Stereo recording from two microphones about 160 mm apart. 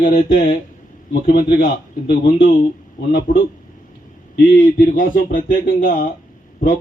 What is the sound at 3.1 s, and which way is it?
Speech, 60° left (ahead or behind).